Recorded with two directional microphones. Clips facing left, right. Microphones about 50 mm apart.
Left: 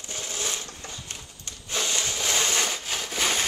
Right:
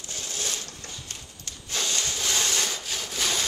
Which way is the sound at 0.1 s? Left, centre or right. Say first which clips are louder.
Left 2 dB; left.